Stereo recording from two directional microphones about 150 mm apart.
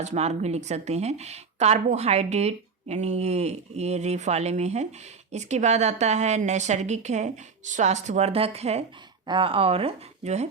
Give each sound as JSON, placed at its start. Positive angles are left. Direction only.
{"t": 0.0, "sound": "a woman's voice", "side_deg": -50}
{"t": 9.2, "sound": "speech", "side_deg": -35}